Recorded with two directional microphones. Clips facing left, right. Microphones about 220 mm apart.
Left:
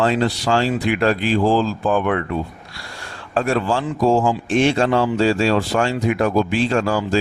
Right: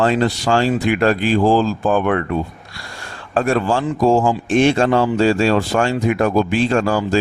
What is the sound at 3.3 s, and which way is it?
Speech, 50° right (ahead or behind).